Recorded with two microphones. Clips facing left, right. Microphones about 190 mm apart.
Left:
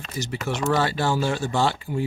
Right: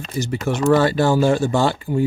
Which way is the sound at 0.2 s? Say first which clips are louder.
Right 6 dB; 50° right (ahead or behind).